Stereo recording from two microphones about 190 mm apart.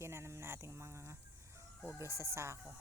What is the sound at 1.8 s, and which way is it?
Speech, 15° right (ahead or behind).